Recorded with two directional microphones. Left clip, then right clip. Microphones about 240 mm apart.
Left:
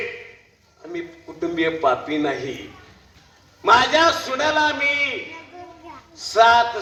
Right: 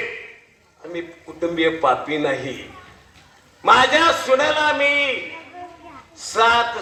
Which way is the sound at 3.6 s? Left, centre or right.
Right.